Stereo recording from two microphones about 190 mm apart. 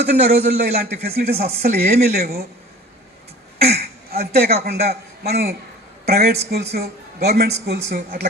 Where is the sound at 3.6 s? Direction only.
55° right (ahead or behind).